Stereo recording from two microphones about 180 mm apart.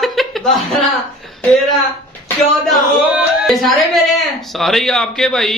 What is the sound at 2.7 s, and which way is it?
Speech, centre (ahead or behind).